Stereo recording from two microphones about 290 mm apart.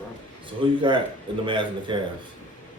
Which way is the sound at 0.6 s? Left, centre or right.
Centre.